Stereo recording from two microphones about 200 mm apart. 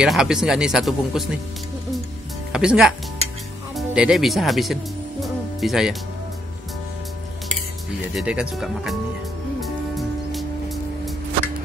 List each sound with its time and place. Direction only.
0.0 s speech: 5° right (ahead or behind)
2.5 s speech: 5° right (ahead or behind)
5.2 s music: centre (ahead or behind)
8.1 s speech: 5° right (ahead or behind)
9.6 s music: centre (ahead or behind)